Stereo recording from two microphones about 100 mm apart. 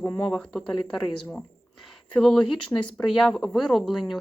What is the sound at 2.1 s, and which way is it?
Speech, 5° left (ahead or behind).